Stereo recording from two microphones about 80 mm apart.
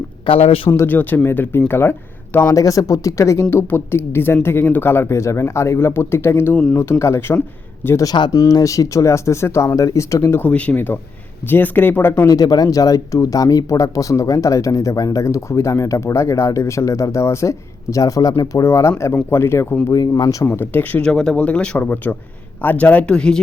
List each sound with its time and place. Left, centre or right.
0.3 s speech: left
0.7 s speech: left
2.5 s speech: left
3.5 s speech: left
8.0 s speech: left
8.3 s speech: left
10.4 s speech: centre
12.3 s speech: left
21.0 s speech: centre